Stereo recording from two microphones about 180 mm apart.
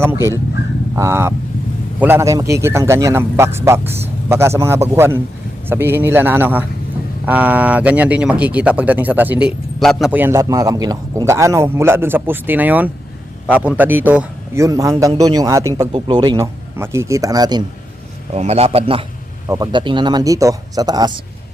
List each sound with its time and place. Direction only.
0.9 s speech: 15° right (ahead or behind)
15.9 s speech: 25° right (ahead or behind)
16.7 s speech: 15° right (ahead or behind)
18.3 s a man's voice: 35° right (ahead or behind)